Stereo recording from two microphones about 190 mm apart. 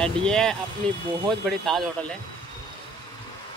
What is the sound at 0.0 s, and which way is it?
A woman's voice, 5° left (ahead or behind).